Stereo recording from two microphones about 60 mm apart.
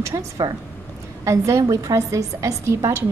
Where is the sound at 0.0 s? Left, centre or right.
Right.